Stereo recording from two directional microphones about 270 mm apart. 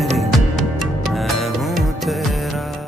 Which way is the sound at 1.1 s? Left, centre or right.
Centre.